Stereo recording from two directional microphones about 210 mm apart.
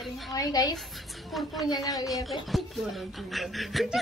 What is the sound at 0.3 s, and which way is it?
Speech, 15° left (ahead or behind).